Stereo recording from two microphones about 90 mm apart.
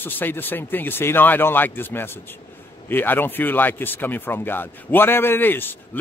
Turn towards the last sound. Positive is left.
turn(degrees=25)  # may be behind; listen again after turning